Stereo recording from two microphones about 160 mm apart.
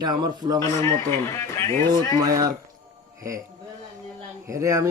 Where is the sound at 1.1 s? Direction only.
15° left (ahead or behind).